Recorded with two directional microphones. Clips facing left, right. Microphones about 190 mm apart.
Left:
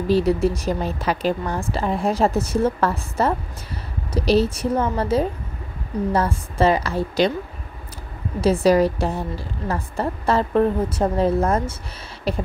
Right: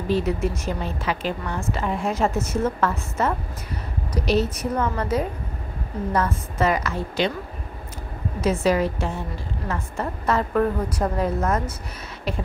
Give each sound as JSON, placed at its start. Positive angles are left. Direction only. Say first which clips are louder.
{"t": 0.1, "sound": "a woman's voice", "louder": "left 5 dB", "side_deg": 35}
{"t": 8.4, "sound": "a woman's voice", "louder": "left 5 dB", "side_deg": 35}